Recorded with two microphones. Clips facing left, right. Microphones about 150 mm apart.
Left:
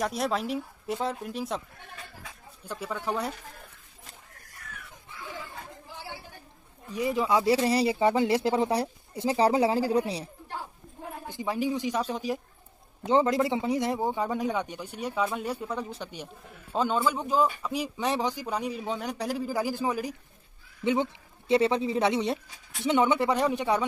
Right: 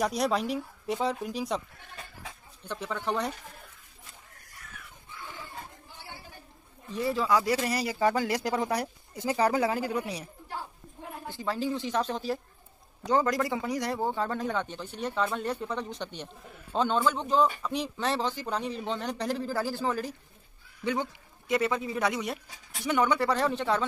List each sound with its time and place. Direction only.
0.0 s speech: centre (ahead or behind)
2.6 s speech: 10° left (ahead or behind)
6.9 s speech: 15° left (ahead or behind)
11.2 s speech: 15° left (ahead or behind)
13.0 s speech: 25° left (ahead or behind)